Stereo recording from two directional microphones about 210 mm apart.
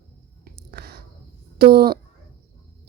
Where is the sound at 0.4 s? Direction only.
45° right (ahead or behind).